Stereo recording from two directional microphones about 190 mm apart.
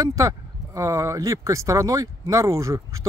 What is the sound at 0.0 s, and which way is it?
Speech, 15° right (ahead or behind).